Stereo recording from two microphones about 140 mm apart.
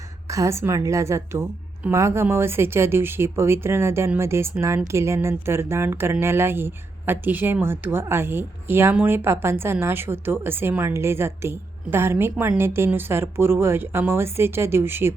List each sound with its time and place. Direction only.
0.3 s a woman's voice: 20° right (ahead or behind)